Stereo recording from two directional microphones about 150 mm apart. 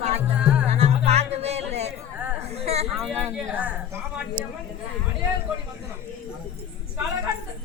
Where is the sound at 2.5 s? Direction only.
45° right (ahead or behind).